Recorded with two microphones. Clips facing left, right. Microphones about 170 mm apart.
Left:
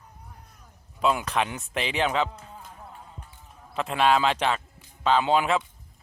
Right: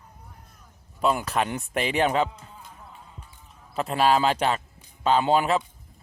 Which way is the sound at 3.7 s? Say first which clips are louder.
Right 1 dB; 40° right (ahead or behind).